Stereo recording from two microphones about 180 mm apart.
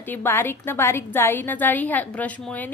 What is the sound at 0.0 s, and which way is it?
A woman's voice, 10° left (ahead or behind).